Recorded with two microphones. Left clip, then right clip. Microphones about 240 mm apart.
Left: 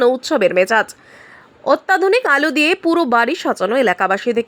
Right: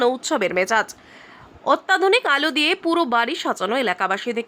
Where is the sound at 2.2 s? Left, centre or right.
Centre.